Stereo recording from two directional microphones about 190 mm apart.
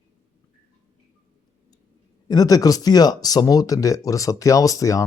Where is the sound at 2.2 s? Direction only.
20° left (ahead or behind).